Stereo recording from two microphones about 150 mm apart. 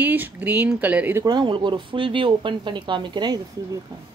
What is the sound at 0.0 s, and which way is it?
Speech, 10° right (ahead or behind).